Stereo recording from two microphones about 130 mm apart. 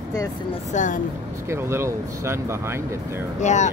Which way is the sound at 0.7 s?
75° left (ahead or behind).